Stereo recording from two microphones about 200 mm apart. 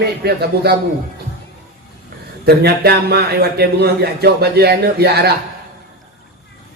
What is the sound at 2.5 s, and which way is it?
Speech, 50° right (ahead or behind).